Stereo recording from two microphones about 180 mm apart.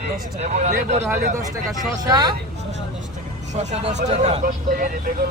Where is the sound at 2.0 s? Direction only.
20° right (ahead or behind).